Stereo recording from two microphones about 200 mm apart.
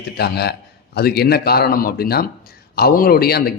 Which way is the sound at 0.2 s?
55° left (ahead or behind).